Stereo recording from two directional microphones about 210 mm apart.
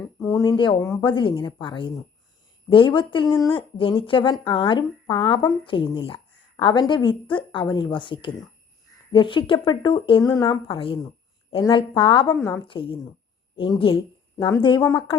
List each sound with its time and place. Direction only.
0.0 s speech: 15° left (ahead or behind)